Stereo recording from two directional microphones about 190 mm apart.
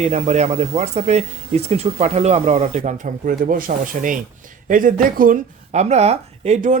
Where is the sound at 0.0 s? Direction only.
35° right (ahead or behind).